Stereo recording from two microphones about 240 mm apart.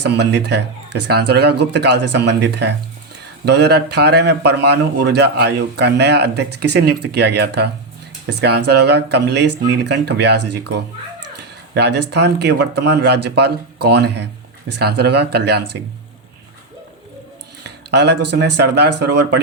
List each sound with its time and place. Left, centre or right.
0.0 s speech: right
11.7 s speech: right
17.6 s a sound: right
18.3 s speech: right